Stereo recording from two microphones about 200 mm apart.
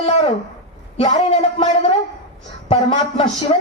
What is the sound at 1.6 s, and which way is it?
Speech, 30° left (ahead or behind).